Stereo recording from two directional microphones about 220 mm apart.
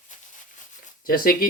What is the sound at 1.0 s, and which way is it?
Speech, 40° left (ahead or behind).